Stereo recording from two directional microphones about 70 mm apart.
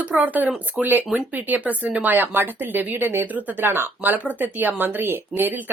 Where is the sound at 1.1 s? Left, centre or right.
Right.